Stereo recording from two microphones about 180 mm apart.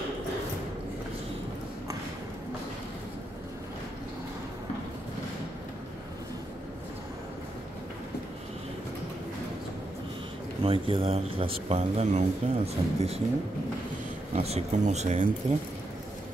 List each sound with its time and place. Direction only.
10.6 s speech: 30° right (ahead or behind)
14.3 s speech: 35° right (ahead or behind)